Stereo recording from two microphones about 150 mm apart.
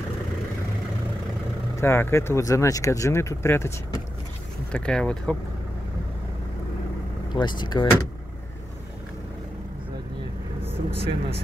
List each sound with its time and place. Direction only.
1.8 s speech: 15° left (ahead or behind)
4.7 s speech: 5° left (ahead or behind)
7.3 s speech: 30° left (ahead or behind)
11.0 s speech: 40° right (ahead or behind)